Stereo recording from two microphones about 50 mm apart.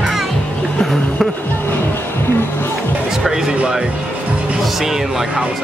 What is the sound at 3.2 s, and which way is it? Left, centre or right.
Speech, centre.